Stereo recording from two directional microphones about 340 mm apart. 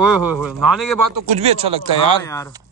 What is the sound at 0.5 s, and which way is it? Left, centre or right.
Speech, centre.